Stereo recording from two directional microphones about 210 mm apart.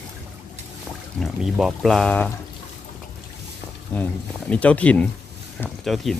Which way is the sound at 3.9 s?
5° left (ahead or behind).